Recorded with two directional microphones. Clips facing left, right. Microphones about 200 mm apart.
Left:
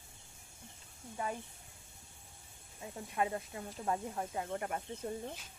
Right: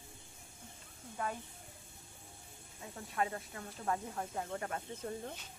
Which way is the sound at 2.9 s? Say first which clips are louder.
Left 2 dB; 20° left (ahead or behind).